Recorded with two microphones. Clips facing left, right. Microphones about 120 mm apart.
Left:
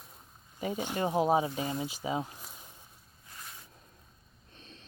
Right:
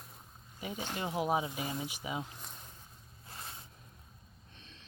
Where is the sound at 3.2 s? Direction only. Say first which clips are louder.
Right 2 dB; 30° right (ahead or behind).